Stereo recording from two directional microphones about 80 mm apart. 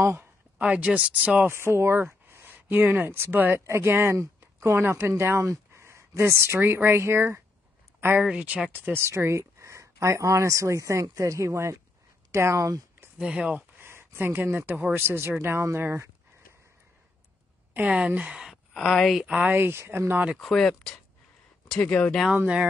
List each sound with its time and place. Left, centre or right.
0.0 s speech: right
0.6 s speech: centre
1.5 s a woman's voice: right
8.2 s speech: centre
9.0 s speech: right
13.2 s speech: centre
13.6 s a sound: right
14.7 s speech: right
17.7 s speech: centre
18.7 s speech: centre
19.2 s speech: centre
20.3 s speech: centre
22.0 s speech: centre
22.3 s speech: centre